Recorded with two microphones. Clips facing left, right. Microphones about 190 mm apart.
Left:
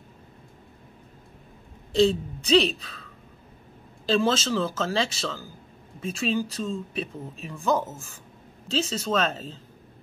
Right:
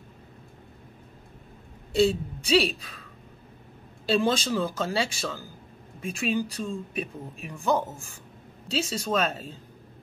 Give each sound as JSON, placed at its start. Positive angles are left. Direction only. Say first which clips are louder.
{"t": 2.0, "sound": "speech", "louder": "left 2 dB", "side_deg": -10}
{"t": 4.1, "sound": "speech", "louder": "left 1 dB", "side_deg": -15}